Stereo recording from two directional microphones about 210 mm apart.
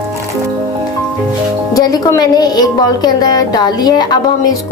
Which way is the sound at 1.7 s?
15° left (ahead or behind).